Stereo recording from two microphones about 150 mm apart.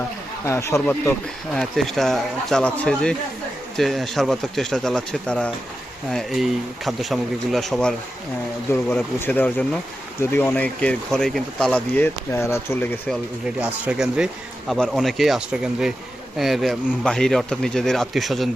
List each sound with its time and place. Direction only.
0.4 s speech: 20° left (ahead or behind)
1.5 s speech: centre (ahead or behind); by 12.8 s 20° left (ahead or behind)
13.6 s speech: 10° right (ahead or behind)